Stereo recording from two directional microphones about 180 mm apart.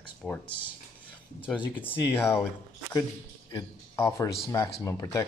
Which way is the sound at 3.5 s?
15° left (ahead or behind).